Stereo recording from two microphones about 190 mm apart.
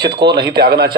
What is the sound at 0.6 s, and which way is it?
Speech, 55° right (ahead or behind).